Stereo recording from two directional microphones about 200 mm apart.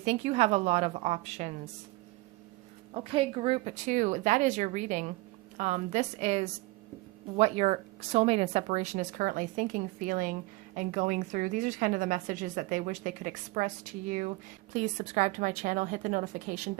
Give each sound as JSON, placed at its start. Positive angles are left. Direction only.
{"t": 0.0, "sound": "a woman's voice", "side_deg": -35}
{"t": 2.9, "sound": "a woman's voice", "side_deg": -25}